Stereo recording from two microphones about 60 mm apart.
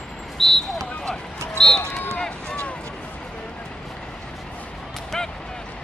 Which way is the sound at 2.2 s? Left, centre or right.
Centre.